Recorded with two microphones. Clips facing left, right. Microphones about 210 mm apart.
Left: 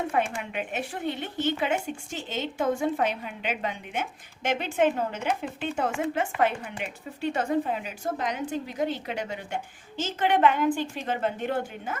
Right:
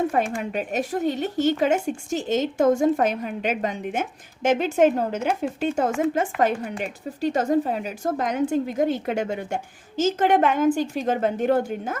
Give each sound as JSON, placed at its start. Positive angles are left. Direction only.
{"t": 0.1, "sound": "a woman's voice", "side_deg": -40}